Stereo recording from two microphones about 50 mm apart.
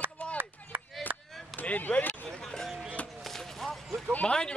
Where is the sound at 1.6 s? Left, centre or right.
Left.